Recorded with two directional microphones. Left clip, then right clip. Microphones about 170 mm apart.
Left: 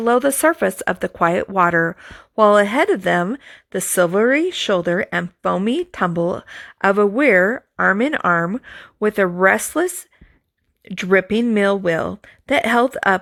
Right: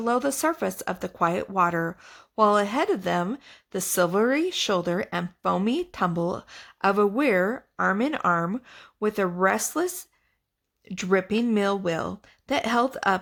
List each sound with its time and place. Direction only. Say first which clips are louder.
0.0 s speech: left 9 dB; 30° left (ahead or behind)